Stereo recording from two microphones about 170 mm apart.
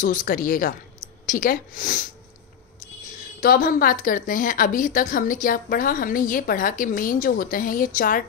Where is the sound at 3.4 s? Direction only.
55° left (ahead or behind).